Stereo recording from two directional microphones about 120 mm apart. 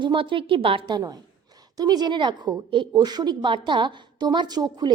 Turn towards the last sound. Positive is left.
turn(degrees=-35)  # may be behind; listen again after turning